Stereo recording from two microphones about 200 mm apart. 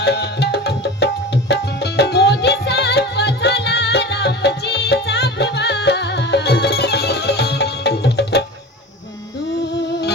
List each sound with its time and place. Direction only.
0.0 s music: 55° left (ahead or behind)